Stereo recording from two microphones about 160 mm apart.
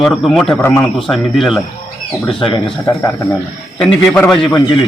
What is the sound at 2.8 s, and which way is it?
Speech, 15° left (ahead or behind).